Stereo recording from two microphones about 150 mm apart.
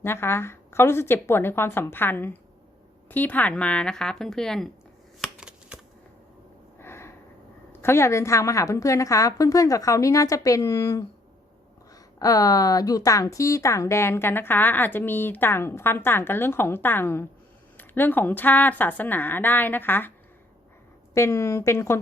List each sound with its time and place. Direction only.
0.0 s speech: 15° left (ahead or behind)
5.2 s shuffling cards: 5° right (ahead or behind)
6.7 s a sound: 15° left (ahead or behind)
7.7 s a woman's voice: 15° left (ahead or behind)
12.2 s a woman's voice: 25° left (ahead or behind)